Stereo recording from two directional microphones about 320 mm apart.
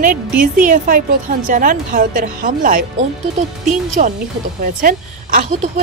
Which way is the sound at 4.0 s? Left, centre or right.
Right.